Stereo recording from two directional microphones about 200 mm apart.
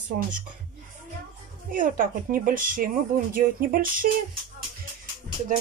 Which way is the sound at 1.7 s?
45° right (ahead or behind).